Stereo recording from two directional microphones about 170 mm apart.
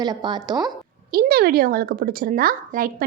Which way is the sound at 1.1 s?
60° right (ahead or behind).